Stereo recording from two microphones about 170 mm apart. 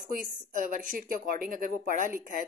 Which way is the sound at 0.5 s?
50° right (ahead or behind).